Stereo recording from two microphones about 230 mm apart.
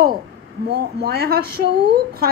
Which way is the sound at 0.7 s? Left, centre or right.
Right.